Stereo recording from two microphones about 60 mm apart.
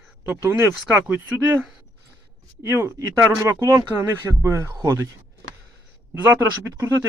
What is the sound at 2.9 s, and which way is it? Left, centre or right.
Speech, right.